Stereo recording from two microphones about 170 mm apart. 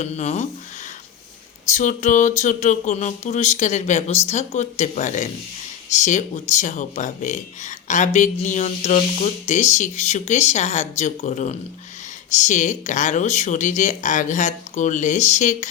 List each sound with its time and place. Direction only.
0.0 s speech: 40° left (ahead or behind)
1.7 s speech: 45° left (ahead or behind)